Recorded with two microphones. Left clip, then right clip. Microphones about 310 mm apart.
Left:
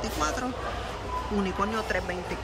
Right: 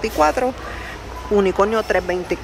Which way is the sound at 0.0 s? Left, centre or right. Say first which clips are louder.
Right 12 dB; centre.